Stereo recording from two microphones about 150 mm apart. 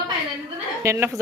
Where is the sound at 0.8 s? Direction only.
15° right (ahead or behind).